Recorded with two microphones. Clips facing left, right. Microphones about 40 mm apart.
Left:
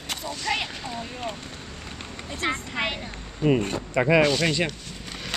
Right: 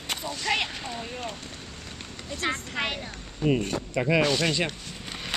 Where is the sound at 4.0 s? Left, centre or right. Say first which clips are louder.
Left 4 dB; left.